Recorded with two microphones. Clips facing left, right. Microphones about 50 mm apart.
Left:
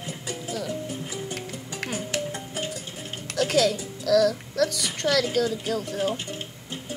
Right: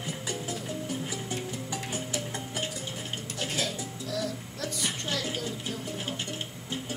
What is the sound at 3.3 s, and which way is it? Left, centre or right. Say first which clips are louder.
Music: left 12 dB; left.